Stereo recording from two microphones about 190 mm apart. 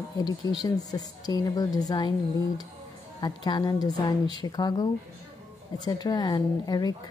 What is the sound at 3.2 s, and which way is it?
A woman's voice, 20° left (ahead or behind).